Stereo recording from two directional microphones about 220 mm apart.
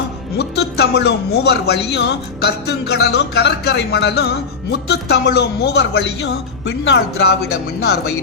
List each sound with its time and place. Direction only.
0.3 s a man's voice: 50° left (ahead or behind)